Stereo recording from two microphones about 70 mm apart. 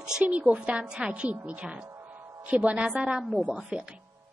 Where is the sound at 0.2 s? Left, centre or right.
Centre.